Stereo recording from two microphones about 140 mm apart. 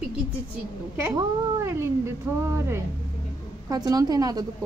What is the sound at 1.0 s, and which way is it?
Speech, 20° right (ahead or behind).